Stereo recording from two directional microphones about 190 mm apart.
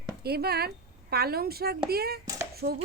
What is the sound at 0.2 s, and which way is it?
A woman's voice, 55° right (ahead or behind).